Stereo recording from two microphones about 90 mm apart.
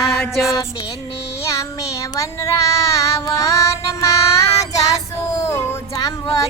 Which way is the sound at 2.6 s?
35° left (ahead or behind).